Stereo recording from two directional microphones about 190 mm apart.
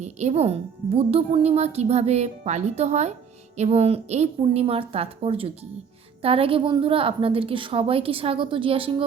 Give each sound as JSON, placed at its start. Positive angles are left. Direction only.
{"t": 0.0, "sound": "a woman's voice", "side_deg": -35}